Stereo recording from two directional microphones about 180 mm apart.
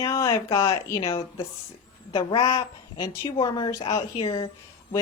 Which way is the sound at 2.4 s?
20° left (ahead or behind).